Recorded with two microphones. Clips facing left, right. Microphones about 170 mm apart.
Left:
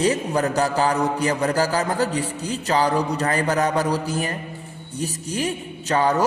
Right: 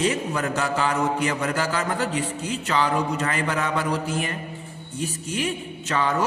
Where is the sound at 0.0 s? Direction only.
35° left (ahead or behind).